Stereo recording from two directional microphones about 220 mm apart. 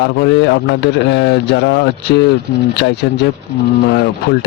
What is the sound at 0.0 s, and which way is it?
Speech, 50° left (ahead or behind).